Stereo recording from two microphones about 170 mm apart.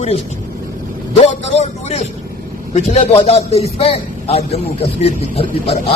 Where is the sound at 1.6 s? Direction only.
40° left (ahead or behind).